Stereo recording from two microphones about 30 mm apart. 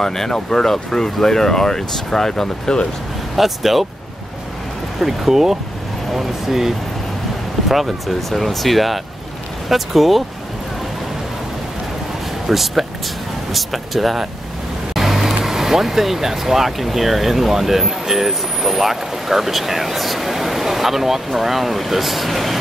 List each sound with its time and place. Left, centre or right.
0.0 s speech: centre
3.3 s speech: centre
5.0 s speech: centre
12.4 s speech: centre
15.0 s vehicle: centre
15.4 s speech: centre